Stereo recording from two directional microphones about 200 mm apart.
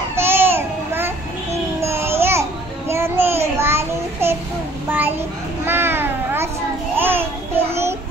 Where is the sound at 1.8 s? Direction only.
10° right (ahead or behind).